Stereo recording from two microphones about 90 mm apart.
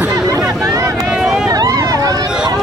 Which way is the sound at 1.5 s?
40° right (ahead or behind).